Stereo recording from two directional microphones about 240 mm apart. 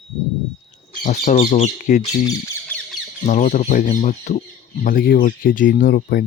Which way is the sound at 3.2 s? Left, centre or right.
Left.